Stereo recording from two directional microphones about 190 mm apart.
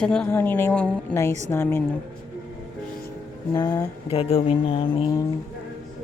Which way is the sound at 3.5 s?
20° left (ahead or behind).